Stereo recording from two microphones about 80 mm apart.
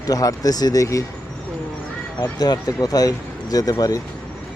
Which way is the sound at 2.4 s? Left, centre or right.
Left.